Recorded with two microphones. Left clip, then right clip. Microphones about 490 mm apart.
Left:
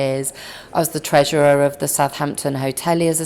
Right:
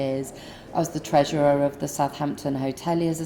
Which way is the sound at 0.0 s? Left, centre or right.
Left.